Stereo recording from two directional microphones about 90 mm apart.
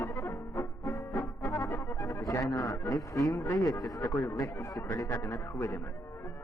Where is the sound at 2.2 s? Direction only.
45° left (ahead or behind).